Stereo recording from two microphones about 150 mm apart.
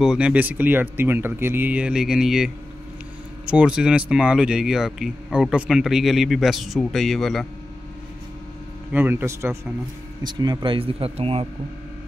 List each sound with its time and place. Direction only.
0.0 s speech: 5° right (ahead or behind)
8.9 s a man's voice: 15° right (ahead or behind); by 11.4 s 40° right (ahead or behind)